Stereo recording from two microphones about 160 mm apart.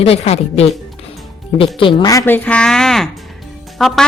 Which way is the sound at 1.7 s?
30° left (ahead or behind).